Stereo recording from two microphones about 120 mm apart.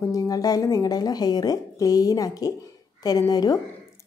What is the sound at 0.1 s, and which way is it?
A woman's voice, 30° left (ahead or behind).